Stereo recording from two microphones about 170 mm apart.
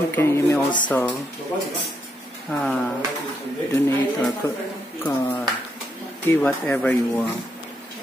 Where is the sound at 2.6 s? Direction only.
5° left (ahead or behind).